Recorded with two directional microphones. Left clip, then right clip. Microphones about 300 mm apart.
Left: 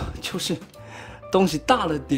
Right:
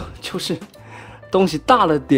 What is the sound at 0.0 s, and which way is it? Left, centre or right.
Speech, centre.